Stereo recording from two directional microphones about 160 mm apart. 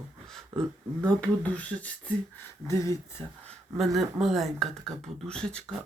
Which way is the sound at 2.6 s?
20° left (ahead or behind).